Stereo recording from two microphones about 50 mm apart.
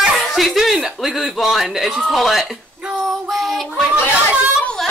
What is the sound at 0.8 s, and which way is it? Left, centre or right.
Speech, centre.